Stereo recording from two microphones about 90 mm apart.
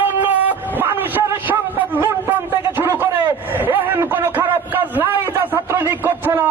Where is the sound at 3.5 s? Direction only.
20° right (ahead or behind).